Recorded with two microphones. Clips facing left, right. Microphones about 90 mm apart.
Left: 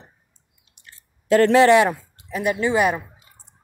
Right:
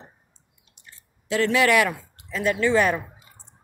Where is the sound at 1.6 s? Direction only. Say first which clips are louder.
Left 3 dB; 30° left (ahead or behind); by 3.0 s 10° left (ahead or behind).